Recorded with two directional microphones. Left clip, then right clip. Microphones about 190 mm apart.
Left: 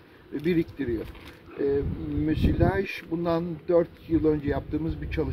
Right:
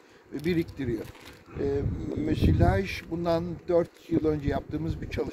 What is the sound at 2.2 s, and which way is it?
Speech, 15° right (ahead or behind).